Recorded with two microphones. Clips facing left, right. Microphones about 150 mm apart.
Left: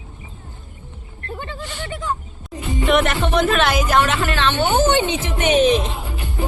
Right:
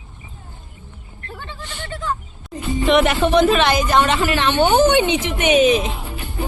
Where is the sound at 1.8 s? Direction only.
10° left (ahead or behind).